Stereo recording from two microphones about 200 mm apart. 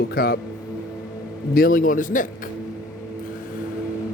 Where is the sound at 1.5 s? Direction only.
45° left (ahead or behind).